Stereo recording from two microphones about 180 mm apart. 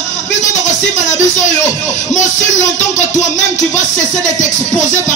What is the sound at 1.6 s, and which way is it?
Speech, 40° left (ahead or behind).